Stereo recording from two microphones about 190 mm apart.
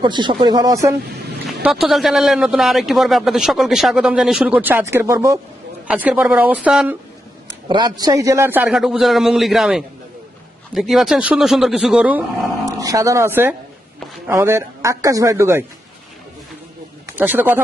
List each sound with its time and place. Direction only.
0.0 s a man's voice: 25° right (ahead or behind)
1.6 s a man's voice: centre (ahead or behind)
7.7 s a man's voice: 25° right (ahead or behind)
17.1 s speech: 10° right (ahead or behind)